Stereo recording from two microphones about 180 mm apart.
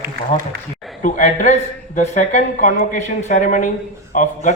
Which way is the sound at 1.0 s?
45° left (ahead or behind).